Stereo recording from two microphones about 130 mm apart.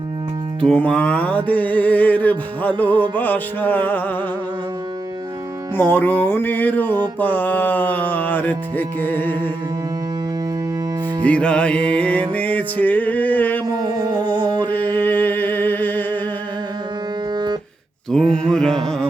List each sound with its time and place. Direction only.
0.6 s music: 10° left (ahead or behind)
5.7 s music: 15° left (ahead or behind)
11.2 s music: 10° left (ahead or behind)
13.7 s music: 30° right (ahead or behind)
14.9 s music: 15° left (ahead or behind)
17.3 s music: 35° right (ahead or behind)
18.1 s mantra: 5° left (ahead or behind)